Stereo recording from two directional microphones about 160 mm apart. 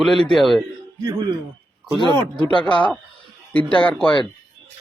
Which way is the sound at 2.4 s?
30° left (ahead or behind).